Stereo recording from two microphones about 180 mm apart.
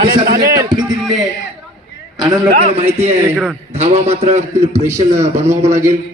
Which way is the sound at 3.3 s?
5° right (ahead or behind).